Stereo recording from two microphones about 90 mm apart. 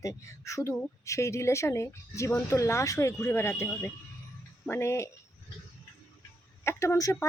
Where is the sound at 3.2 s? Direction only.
25° left (ahead or behind).